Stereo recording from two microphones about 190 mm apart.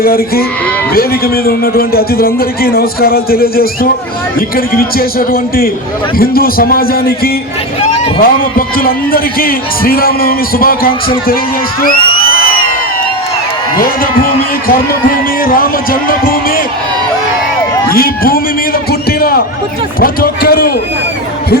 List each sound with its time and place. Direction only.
0.0 s a man's voice: 50° left (ahead or behind)
13.7 s a man's voice: 50° left (ahead or behind)
17.8 s a man's voice: 50° left (ahead or behind)